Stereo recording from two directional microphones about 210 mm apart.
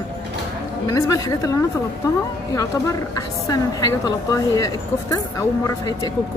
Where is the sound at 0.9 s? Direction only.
15° left (ahead or behind).